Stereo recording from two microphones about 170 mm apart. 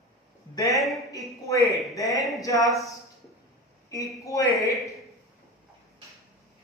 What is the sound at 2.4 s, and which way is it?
Speech, 20° left (ahead or behind).